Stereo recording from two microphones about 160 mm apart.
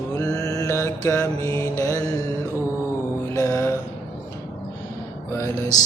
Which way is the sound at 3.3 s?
20° left (ahead or behind).